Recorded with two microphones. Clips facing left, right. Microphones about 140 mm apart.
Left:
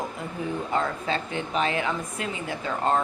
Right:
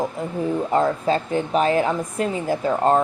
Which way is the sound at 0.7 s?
40° right (ahead or behind).